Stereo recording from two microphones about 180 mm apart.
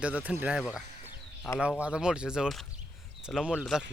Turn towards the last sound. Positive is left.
turn(degrees=-5)  # may be behind; listen again after turning